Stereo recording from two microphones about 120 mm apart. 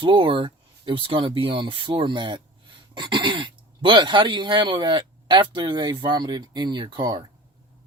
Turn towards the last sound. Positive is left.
turn(degrees=-40)  # may be behind; listen again after turning